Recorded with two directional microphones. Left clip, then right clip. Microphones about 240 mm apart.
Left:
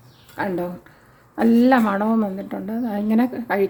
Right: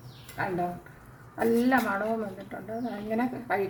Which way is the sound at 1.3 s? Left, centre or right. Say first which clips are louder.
Left 8 dB; left.